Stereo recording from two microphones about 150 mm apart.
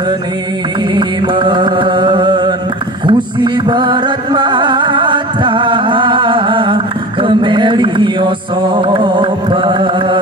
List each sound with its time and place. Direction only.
0.9 s music: 30° right (ahead or behind)